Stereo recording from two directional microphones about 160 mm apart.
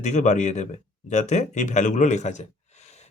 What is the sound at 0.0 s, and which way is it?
Speech, 50° left (ahead or behind).